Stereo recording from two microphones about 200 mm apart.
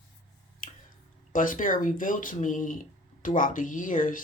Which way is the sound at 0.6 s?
40° left (ahead or behind).